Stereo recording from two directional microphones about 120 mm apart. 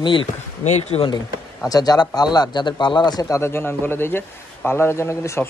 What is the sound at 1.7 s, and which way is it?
Speech, 30° left (ahead or behind).